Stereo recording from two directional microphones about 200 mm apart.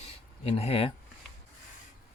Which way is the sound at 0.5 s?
30° left (ahead or behind).